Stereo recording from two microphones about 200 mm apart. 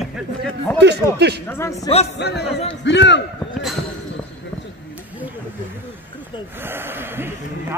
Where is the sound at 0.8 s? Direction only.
60° right (ahead or behind).